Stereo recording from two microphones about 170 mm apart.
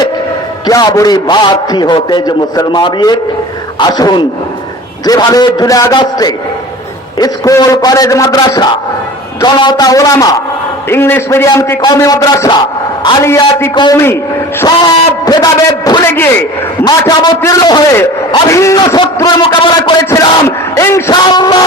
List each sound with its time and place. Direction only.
0.7 s a man's voice: 20° left (ahead or behind)
16.0 s a man's voice: 10° left (ahead or behind)